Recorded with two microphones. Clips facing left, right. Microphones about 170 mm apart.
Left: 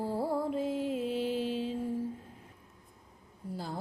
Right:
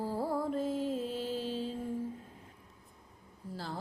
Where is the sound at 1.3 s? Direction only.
40° right (ahead or behind).